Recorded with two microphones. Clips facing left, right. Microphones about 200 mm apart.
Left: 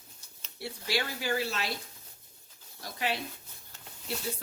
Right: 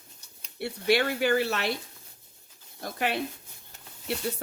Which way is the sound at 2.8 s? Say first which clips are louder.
Right 5 dB; 55° right (ahead or behind).